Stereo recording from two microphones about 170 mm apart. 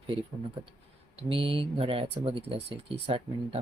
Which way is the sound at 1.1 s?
30° right (ahead or behind).